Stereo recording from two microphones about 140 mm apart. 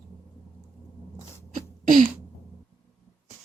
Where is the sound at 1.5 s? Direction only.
70° right (ahead or behind).